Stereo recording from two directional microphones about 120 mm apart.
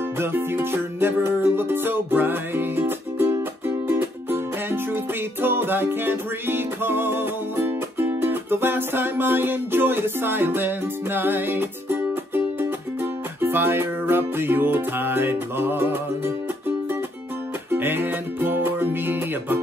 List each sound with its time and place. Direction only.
0.2 s music: 20° right (ahead or behind)
17.6 s music: 15° right (ahead or behind)